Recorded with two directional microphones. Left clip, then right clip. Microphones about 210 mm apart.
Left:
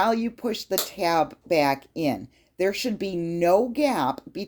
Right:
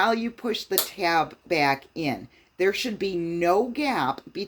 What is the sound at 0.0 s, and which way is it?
Speech, 45° left (ahead or behind).